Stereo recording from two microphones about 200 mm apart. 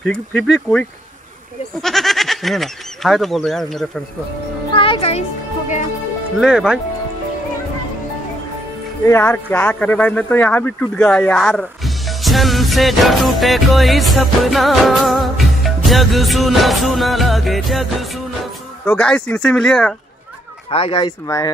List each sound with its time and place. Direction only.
0.0 s speech: 5° left (ahead or behind)
4.7 s music: 25° left (ahead or behind)
6.4 s speech: 5° right (ahead or behind)
9.0 s speech: 10° left (ahead or behind)
20.7 s speech: 25° left (ahead or behind)